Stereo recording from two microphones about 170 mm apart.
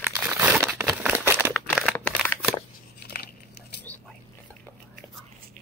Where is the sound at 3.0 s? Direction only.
70° left (ahead or behind).